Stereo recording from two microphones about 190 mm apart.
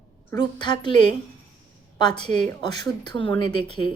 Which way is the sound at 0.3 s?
20° left (ahead or behind).